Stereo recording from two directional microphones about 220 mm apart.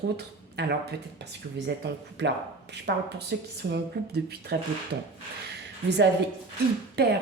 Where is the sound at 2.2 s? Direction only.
50° right (ahead or behind).